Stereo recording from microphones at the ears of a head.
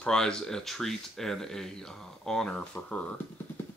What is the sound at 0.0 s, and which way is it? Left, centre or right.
Speech, centre.